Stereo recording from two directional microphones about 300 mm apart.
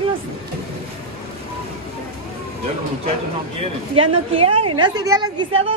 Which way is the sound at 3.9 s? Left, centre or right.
Centre.